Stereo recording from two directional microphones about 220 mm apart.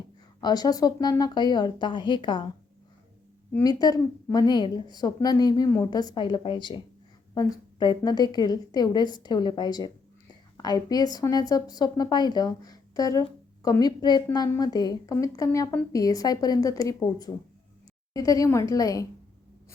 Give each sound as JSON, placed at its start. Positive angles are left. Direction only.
{"t": 0.4, "sound": "a woman's voice", "side_deg": 15}
{"t": 3.5, "sound": "a woman's voice", "side_deg": 15}